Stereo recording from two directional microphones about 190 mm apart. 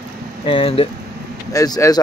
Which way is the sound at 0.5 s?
30° left (ahead or behind).